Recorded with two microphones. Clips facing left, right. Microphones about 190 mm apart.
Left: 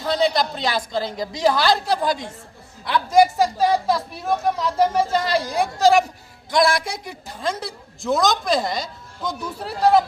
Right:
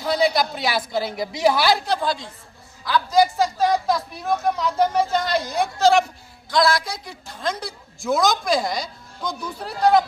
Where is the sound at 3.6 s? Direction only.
5° left (ahead or behind).